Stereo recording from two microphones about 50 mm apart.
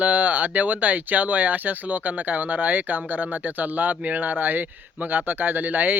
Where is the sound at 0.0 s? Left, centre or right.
Right.